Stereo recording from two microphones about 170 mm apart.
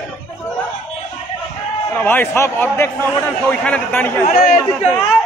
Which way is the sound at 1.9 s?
10° left (ahead or behind).